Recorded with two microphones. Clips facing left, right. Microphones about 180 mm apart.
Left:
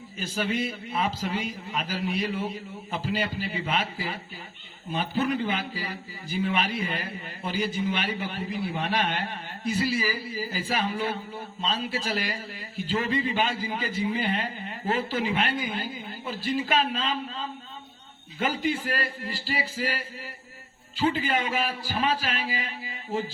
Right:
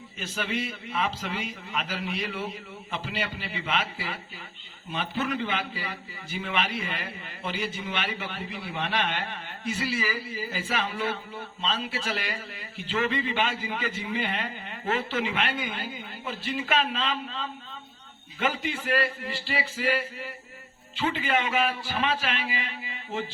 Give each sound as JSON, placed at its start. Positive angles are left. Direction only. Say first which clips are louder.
{"t": 0.2, "sound": "a man's voice", "louder": "left 3 dB", "side_deg": 35}